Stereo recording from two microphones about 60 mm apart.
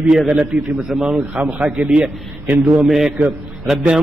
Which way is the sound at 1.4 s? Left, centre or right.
Right.